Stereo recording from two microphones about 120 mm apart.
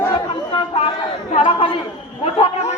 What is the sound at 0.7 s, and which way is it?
Chatter, 55° left (ahead or behind).